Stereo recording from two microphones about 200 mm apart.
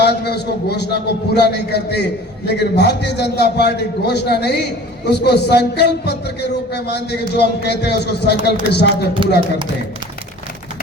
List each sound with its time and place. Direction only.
0.0 s a man's voice: 55° left (ahead or behind)
9.2 s speech: 25° right (ahead or behind)